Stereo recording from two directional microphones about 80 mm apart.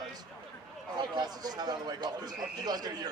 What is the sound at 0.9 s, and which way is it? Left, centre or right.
Speech, right.